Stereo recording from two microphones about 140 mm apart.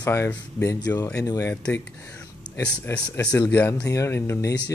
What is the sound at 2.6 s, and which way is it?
Speech, 10° left (ahead or behind).